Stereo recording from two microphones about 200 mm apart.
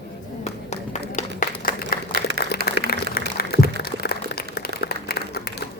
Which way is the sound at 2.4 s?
60° left (ahead or behind).